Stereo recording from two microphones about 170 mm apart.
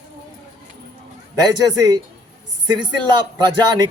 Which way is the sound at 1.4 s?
25° right (ahead or behind).